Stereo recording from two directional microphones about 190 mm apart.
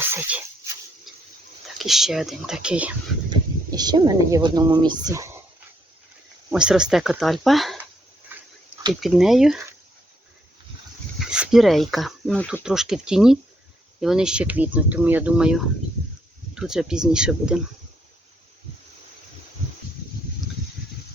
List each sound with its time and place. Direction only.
0.0 s speech: 10° right (ahead or behind)
3.2 s speech: 20° right (ahead or behind)
6.5 s speech: 5° right (ahead or behind)
8.3 s dog: 10° right (ahead or behind)
8.9 s speech: centre (ahead or behind)
11.2 s speech: centre (ahead or behind)